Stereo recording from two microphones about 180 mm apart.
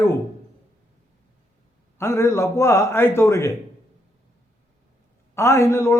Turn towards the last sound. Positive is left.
turn(degrees=15)  # may be behind; listen again after turning